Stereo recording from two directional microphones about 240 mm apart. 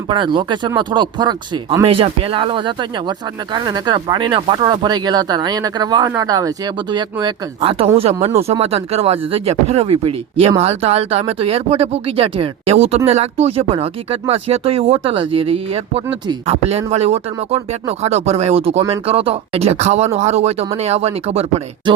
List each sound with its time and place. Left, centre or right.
0.1 s speech: centre